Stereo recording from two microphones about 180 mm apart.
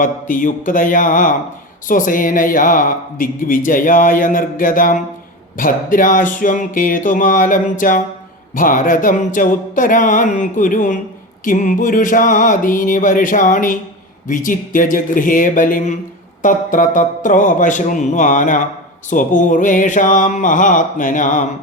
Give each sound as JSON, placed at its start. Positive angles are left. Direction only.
{"t": 0.0, "sound": "speech", "side_deg": 50}